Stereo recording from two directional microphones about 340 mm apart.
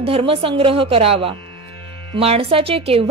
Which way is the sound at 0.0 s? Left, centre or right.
Centre.